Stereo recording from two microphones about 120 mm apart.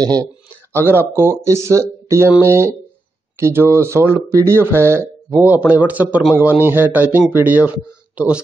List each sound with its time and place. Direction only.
0.0 s speech: 35° right (ahead or behind)
0.8 s speech: 20° right (ahead or behind)